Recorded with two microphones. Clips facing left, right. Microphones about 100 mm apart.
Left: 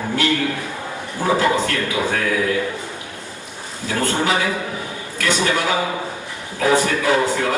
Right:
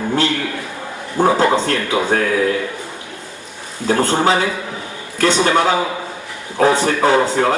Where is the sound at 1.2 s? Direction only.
30° right (ahead or behind).